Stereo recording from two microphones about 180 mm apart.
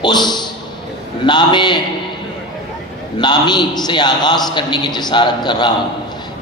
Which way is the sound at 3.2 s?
25° left (ahead or behind).